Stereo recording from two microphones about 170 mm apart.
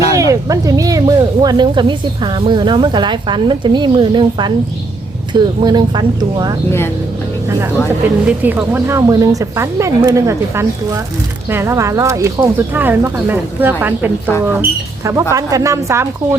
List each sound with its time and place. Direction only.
0.1 s speech: 20° right (ahead or behind)
8.0 s speech: 10° right (ahead or behind)